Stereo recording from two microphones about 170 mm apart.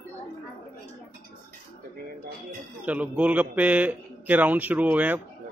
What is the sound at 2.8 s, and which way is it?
A man's voice, 10° right (ahead or behind).